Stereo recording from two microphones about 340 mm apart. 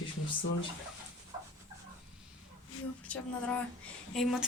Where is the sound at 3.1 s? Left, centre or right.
Centre.